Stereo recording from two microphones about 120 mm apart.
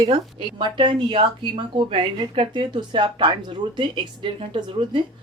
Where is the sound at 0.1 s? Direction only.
45° right (ahead or behind).